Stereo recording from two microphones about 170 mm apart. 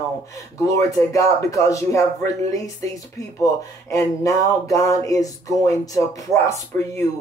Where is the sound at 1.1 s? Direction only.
20° left (ahead or behind).